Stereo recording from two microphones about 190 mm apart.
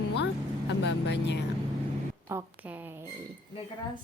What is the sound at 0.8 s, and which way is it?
Speech, 65° left (ahead or behind).